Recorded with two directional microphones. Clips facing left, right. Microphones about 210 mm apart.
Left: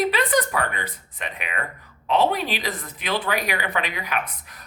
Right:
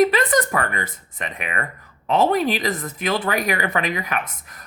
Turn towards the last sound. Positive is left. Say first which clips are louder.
# right 1 dB
turn(degrees=-45)  # may be behind; listen again after turning